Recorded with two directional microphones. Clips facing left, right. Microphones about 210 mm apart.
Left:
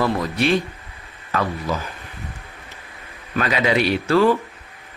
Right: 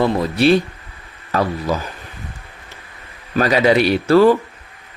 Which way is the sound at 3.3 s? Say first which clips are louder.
Right 6 dB; 35° right (ahead or behind).